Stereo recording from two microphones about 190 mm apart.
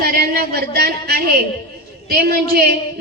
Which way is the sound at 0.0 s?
55° right (ahead or behind).